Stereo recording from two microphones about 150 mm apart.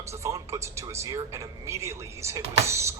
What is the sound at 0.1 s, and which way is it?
A man's voice, 20° right (ahead or behind).